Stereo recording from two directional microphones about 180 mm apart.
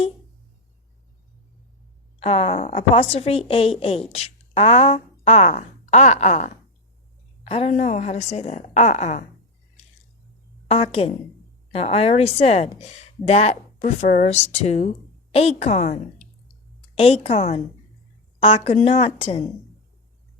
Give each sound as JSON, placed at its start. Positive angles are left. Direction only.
{"t": 2.1, "sound": "a woman's voice", "side_deg": 30}
{"t": 10.7, "sound": "a woman's voice", "side_deg": 35}
{"t": 16.9, "sound": "a woman's voice", "side_deg": 35}